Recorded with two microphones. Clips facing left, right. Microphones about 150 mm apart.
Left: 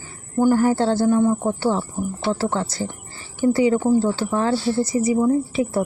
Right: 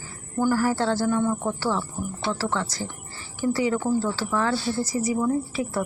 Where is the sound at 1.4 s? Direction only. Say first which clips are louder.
Left 5 dB; 35° left (ahead or behind).